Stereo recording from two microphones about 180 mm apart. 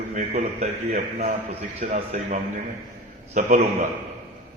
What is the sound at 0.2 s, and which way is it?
Speech, 40° right (ahead or behind).